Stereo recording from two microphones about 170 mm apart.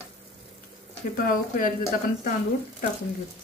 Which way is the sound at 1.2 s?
55° left (ahead or behind).